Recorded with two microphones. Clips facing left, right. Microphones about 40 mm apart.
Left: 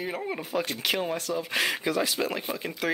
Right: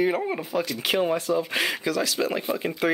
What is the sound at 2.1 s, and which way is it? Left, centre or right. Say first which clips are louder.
Speech: right 4 dB; centre.